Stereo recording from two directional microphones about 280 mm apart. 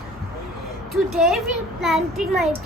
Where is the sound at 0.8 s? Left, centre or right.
Centre.